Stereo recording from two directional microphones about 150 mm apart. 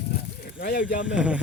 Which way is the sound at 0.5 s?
70° left (ahead or behind).